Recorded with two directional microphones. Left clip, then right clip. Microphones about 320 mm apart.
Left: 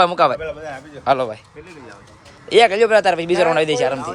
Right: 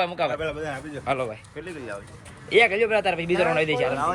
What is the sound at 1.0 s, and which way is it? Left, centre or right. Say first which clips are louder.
Speech: left 9 dB; centre.